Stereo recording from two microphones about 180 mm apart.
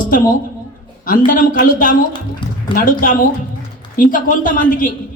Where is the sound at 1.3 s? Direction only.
50° left (ahead or behind).